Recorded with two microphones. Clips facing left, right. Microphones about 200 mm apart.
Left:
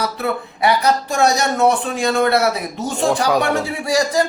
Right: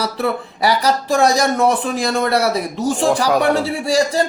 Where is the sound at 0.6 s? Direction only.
35° right (ahead or behind).